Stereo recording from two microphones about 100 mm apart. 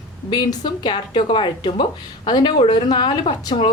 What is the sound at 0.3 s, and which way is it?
A woman's voice, 50° left (ahead or behind).